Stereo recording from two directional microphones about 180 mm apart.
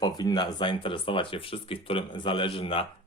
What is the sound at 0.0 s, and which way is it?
Speech, 25° left (ahead or behind).